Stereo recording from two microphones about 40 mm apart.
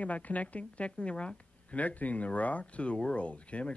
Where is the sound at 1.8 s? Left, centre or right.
Left.